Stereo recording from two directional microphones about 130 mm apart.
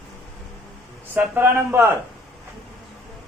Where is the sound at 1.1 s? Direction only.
15° right (ahead or behind).